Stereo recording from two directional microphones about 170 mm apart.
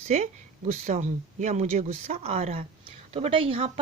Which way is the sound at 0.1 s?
45° right (ahead or behind).